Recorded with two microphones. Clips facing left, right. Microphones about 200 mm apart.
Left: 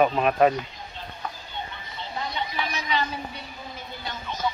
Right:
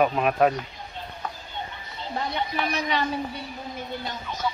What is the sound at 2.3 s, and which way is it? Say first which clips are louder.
Speech: right 4 dB; 60° right (ahead or behind).